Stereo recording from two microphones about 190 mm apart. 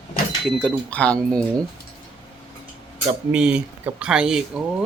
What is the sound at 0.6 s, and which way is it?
Speech, 5° left (ahead or behind).